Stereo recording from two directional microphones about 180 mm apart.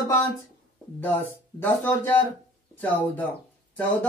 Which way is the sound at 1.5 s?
10° left (ahead or behind).